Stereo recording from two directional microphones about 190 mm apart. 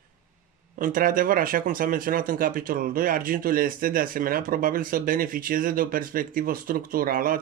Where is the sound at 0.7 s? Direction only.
45° right (ahead or behind).